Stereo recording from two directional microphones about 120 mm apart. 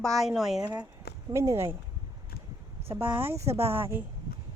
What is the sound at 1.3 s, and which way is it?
Speech, 25° right (ahead or behind).